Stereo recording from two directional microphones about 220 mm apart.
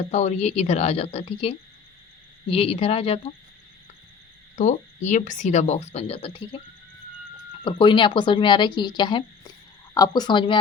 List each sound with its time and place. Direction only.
0.1 s speech: 30° left (ahead or behind)
4.5 s speech: 35° left (ahead or behind)
7.6 s speech: 25° left (ahead or behind)